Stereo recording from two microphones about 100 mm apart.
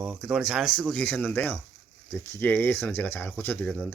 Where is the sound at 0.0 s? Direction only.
5° right (ahead or behind).